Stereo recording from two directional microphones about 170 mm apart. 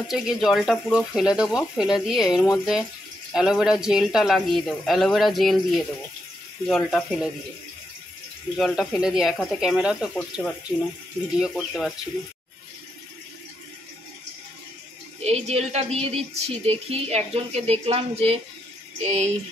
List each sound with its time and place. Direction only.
0.1 s speech: centre (ahead or behind)
8.5 s speech: centre (ahead or behind)
11.3 s speech: centre (ahead or behind)
15.2 s speech: 40° right (ahead or behind)